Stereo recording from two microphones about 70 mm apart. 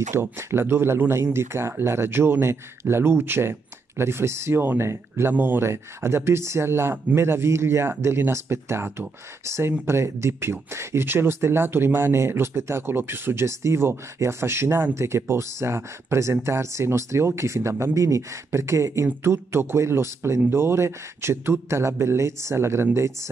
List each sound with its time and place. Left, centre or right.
0.1 s speech: right